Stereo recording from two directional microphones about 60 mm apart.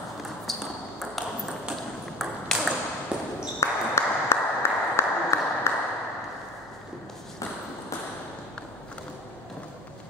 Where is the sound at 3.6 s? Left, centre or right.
Left.